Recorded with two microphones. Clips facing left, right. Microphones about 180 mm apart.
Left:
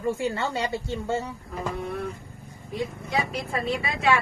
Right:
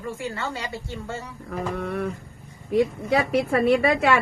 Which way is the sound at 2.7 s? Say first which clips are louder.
Right 8 dB; 65° right (ahead or behind).